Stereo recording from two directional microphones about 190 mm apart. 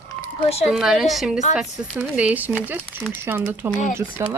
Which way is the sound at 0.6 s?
Centre (ahead or behind).